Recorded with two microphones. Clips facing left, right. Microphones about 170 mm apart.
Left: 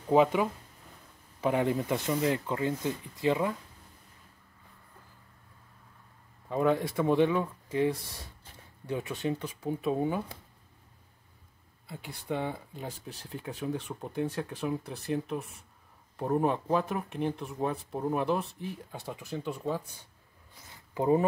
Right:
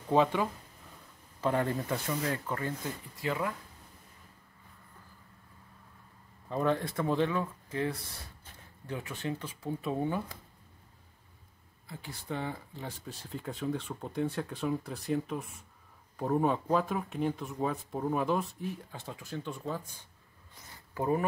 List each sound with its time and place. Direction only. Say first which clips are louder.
0.1 s speech: left 3 dB; 15° left (ahead or behind)
6.5 s speech: left 3 dB; 10° left (ahead or behind)
11.9 s speech: left 4 dB; 15° left (ahead or behind)
14.1 s speech: even; centre (ahead or behind)
16.2 s speech: left 1 dB; centre (ahead or behind)
20.9 s speech: left 5 dB; 20° left (ahead or behind)